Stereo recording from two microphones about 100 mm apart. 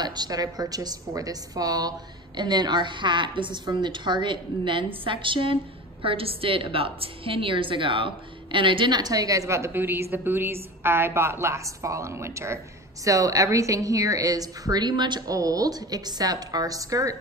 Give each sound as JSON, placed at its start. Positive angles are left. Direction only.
{"t": 0.0, "sound": "a woman's voice", "side_deg": -45}